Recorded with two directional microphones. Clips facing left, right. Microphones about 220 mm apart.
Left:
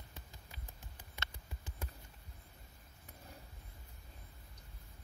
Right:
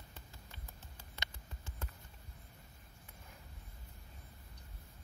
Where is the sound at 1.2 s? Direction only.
15° left (ahead or behind).